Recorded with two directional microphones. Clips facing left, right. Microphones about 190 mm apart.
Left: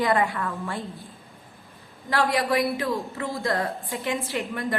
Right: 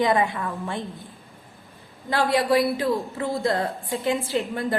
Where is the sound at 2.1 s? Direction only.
30° right (ahead or behind).